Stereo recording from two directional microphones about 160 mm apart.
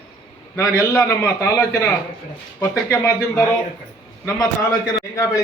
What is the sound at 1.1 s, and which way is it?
A man's voice, 20° left (ahead or behind).